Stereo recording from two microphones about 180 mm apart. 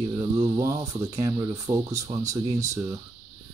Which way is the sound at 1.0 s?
15° right (ahead or behind).